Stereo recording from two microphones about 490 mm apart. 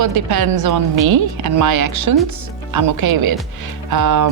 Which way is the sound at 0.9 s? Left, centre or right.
Right.